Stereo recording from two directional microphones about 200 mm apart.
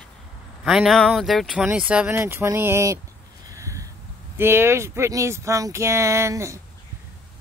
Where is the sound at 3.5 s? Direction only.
15° right (ahead or behind).